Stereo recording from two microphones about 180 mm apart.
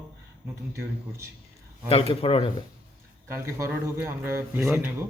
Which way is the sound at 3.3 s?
15° right (ahead or behind).